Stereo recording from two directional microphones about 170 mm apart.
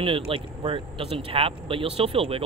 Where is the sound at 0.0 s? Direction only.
30° right (ahead or behind).